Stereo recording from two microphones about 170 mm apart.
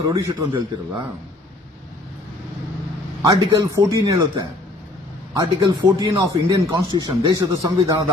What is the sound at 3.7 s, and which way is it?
Speech, 20° right (ahead or behind).